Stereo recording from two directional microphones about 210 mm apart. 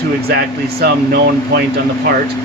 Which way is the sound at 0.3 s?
50° right (ahead or behind).